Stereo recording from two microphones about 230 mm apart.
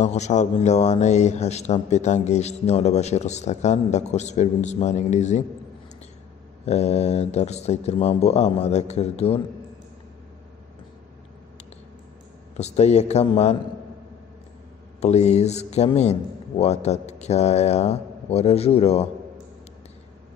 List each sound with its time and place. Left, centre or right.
0.0 s speech: left
6.6 s speech: left
12.5 s speech: left
15.0 s speech: left